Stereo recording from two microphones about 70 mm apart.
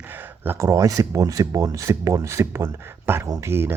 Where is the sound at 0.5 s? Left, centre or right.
Right.